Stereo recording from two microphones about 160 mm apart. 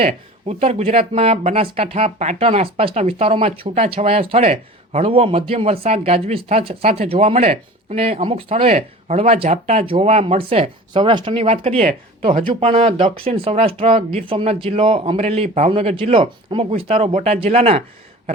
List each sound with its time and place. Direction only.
0.0 s speech: 40° right (ahead or behind)